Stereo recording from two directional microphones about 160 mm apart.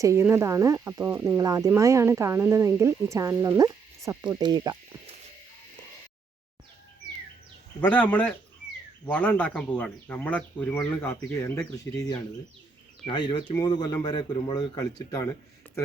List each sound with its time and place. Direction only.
0.0 s speech: 15° right (ahead or behind)
4.4 s insect: 25° right (ahead or behind)
7.8 s speech: 10° left (ahead or behind)